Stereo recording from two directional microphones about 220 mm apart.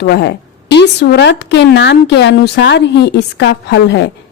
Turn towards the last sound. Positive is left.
turn(degrees=50)  # may be behind; listen again after turning